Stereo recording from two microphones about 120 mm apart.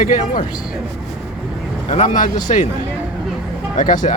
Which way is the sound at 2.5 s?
70° left (ahead or behind).